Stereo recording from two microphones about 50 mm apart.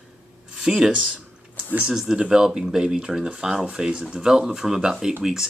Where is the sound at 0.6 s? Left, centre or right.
Centre.